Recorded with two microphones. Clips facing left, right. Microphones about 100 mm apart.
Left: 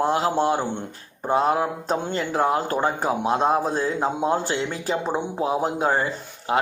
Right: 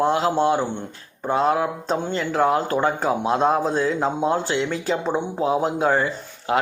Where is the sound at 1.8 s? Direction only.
45° left (ahead or behind).